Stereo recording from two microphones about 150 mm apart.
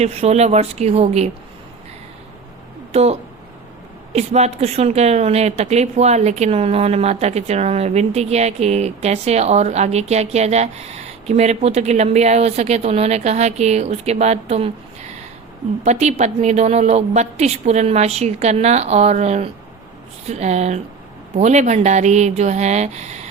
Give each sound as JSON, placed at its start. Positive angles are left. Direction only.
{"t": 0.0, "sound": "a woman's voice", "side_deg": -45}
{"t": 2.9, "sound": "a woman's voice", "side_deg": -45}
{"t": 15.8, "sound": "a woman's voice", "side_deg": -50}